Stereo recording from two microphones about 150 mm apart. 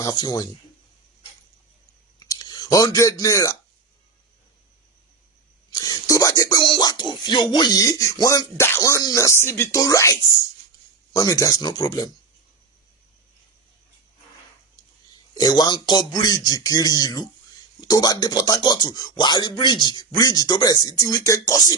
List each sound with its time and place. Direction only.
0.0 s speech: 25° left (ahead or behind)
2.1 s a sound: 25° left (ahead or behind)
5.7 s speech: 25° left (ahead or behind)
15.4 s speech: 25° left (ahead or behind)